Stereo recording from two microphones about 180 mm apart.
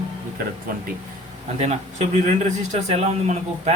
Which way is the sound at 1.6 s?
40° right (ahead or behind).